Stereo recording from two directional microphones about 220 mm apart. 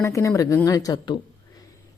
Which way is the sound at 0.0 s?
15° left (ahead or behind).